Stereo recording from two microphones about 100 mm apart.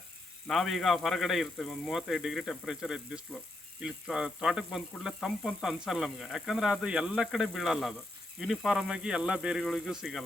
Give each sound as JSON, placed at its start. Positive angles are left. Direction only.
{"t": 0.4, "sound": "speech", "side_deg": 0}